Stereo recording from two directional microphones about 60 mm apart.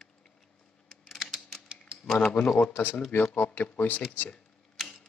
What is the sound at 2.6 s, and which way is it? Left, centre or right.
A man's voice, left.